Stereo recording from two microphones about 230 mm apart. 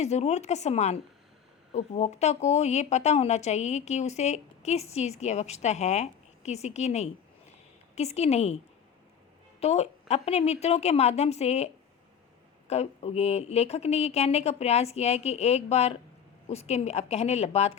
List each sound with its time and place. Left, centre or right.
0.0 s a woman's voice: left
9.6 s a woman's voice: left